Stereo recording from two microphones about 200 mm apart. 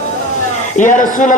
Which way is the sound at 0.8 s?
40° left (ahead or behind).